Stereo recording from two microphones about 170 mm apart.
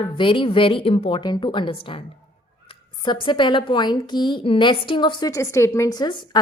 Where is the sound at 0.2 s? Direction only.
30° left (ahead or behind).